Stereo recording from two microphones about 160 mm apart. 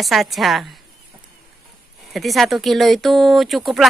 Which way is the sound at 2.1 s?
Centre (ahead or behind).